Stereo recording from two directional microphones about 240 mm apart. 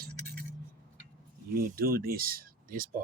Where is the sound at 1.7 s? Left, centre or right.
Right.